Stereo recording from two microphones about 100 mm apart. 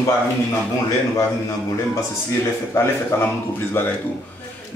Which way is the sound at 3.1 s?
25° left (ahead or behind).